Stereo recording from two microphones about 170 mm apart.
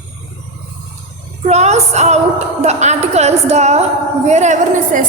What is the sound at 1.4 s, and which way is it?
A woman's voice, 40° right (ahead or behind).